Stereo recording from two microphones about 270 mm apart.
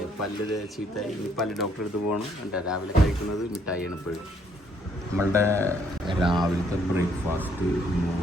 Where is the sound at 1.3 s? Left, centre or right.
Centre.